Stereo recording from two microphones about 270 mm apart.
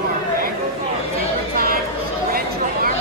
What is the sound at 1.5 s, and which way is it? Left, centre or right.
Chatter, right.